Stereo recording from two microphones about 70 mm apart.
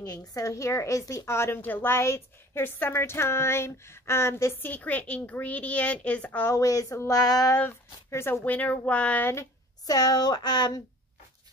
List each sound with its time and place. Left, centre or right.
0.0 s a woman's voice: left
4.6 s a woman's voice: left
6.5 s speech: left
7.0 s female singing: left
8.1 s a woman's voice: left
8.5 s a woman's voice: left
9.8 s speech: left